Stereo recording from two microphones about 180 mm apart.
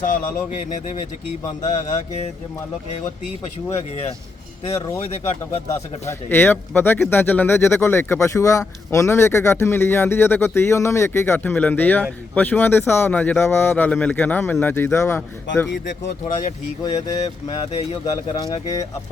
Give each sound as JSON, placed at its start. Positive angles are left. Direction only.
{"t": 0.0, "sound": "speech", "side_deg": 50}
{"t": 5.2, "sound": "speech", "side_deg": 15}
{"t": 16.2, "sound": "speech", "side_deg": 40}
{"t": 18.0, "sound": "speech", "side_deg": 20}